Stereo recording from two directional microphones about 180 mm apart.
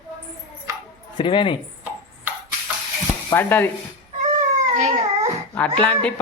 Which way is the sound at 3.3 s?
10° left (ahead or behind).